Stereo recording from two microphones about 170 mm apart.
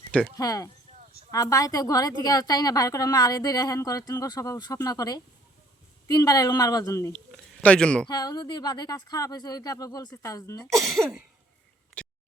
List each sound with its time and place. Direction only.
0.3 s a woman's voice: 20° left (ahead or behind)
7.1 s speech: 5° left (ahead or behind)
8.0 s a woman's voice: 25° left (ahead or behind)
12.0 s a sound: 5° left (ahead or behind)